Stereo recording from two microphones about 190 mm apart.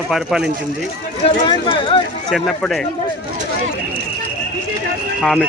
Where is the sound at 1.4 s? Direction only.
25° left (ahead or behind).